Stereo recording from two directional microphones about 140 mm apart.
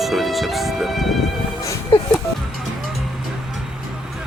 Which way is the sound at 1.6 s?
20° left (ahead or behind).